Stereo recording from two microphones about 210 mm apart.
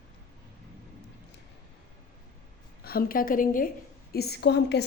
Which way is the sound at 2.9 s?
45° left (ahead or behind).